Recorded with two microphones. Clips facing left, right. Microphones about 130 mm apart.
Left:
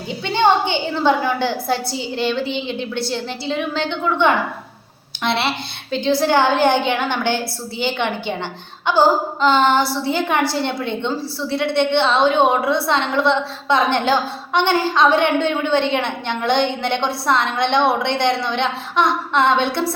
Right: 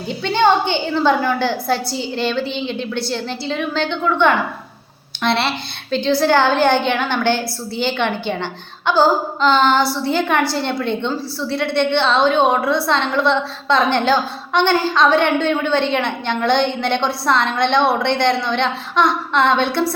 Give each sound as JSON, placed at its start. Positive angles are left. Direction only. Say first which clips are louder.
{"t": 0.1, "sound": "a woman's voice", "louder": "right 1 dB", "side_deg": 15}